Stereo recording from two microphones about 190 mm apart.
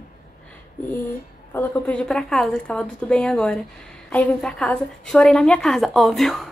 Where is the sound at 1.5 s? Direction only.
5° left (ahead or behind).